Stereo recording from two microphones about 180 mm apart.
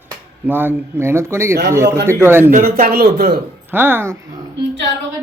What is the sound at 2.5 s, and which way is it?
Speech, 55° right (ahead or behind).